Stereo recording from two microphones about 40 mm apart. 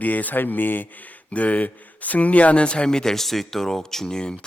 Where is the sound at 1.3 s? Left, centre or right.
Left; by 4.3 s centre.